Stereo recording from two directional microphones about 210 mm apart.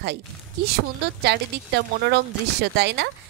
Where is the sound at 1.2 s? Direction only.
55° right (ahead or behind).